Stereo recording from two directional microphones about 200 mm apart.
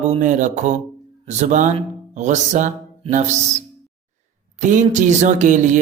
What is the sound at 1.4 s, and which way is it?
Speech, 35° right (ahead or behind).